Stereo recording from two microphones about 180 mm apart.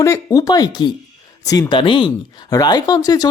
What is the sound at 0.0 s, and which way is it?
Speech, 15° left (ahead or behind).